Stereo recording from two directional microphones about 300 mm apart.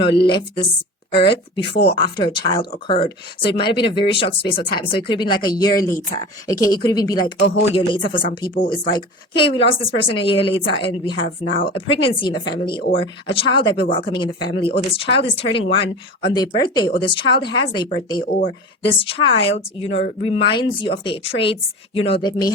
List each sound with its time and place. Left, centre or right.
0.3 s speech: centre
7.3 s speech: left
7.8 s speech: centre
8.1 s speech: left
8.8 s speech: centre